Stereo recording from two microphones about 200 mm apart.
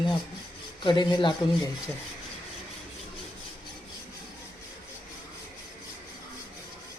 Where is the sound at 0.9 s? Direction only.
20° left (ahead or behind).